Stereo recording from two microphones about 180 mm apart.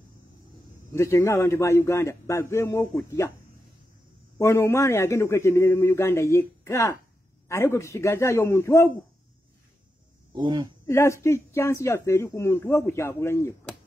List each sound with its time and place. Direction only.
0.9 s speech: 15° left (ahead or behind)
4.4 s speech: 15° left (ahead or behind)
10.3 s speech: 25° right (ahead or behind)
10.9 s speech: 15° left (ahead or behind)